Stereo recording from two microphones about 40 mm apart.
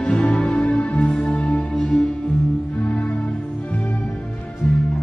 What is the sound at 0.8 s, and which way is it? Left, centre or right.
Music, left.